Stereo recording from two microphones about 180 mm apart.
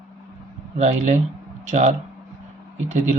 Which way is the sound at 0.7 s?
40° right (ahead or behind).